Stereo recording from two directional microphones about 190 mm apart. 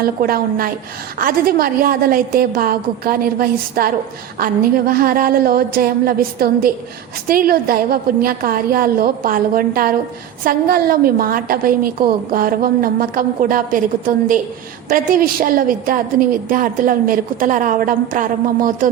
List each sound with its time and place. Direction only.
0.0 s a woman's voice: 50° right (ahead or behind)